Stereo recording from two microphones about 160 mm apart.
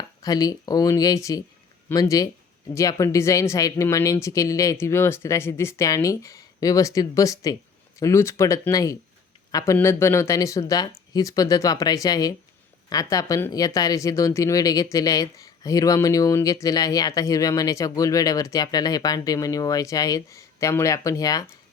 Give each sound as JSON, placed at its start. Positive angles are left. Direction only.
{"t": 0.2, "sound": "speech", "side_deg": 20}